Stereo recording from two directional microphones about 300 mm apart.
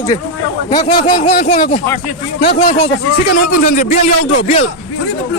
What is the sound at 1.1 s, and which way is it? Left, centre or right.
Speech, left.